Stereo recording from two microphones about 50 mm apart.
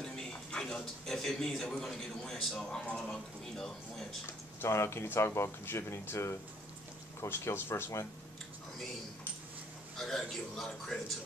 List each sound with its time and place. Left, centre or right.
0.6 s speech: centre
4.6 s speech: left
7.2 s speech: left
9.9 s speech: centre